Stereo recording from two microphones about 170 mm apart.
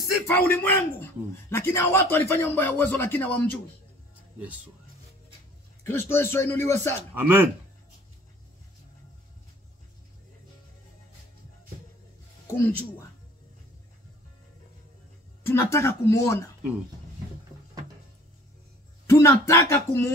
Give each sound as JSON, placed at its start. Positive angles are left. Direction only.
{"t": 0.0, "sound": "a man's voice", "side_deg": 15}
{"t": 5.9, "sound": "a man's voice", "side_deg": 15}
{"t": 7.2, "sound": "speech", "side_deg": -10}
{"t": 12.4, "sound": "speech", "side_deg": 15}
{"t": 15.4, "sound": "a man's voice", "side_deg": 15}
{"t": 19.0, "sound": "a man's voice", "side_deg": 15}